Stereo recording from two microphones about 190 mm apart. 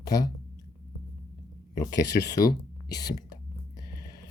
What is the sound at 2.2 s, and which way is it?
Speech, 20° left (ahead or behind).